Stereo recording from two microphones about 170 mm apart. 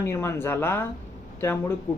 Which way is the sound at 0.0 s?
15° left (ahead or behind).